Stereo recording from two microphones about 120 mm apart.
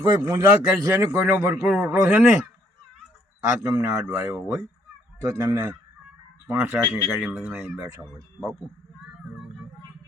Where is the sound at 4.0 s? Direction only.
30° right (ahead or behind).